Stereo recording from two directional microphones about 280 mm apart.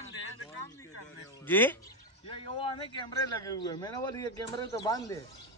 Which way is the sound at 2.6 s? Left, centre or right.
Centre.